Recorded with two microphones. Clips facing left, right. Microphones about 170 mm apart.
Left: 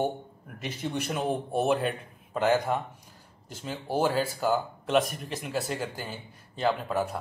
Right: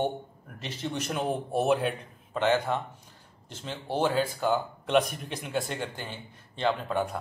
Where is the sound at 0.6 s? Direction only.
10° left (ahead or behind).